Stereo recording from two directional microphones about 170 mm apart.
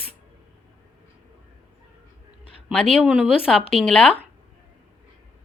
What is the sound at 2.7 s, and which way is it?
Speech, centre (ahead or behind).